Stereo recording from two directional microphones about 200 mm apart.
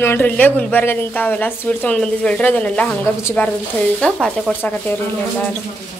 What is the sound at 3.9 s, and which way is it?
Sizzle, centre (ahead or behind).